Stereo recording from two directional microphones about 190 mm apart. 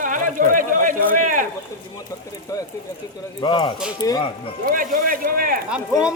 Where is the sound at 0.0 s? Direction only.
45° right (ahead or behind).